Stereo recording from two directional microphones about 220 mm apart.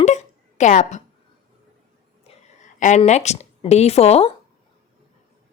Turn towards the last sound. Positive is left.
turn(degrees=30)  # may be behind; listen again after turning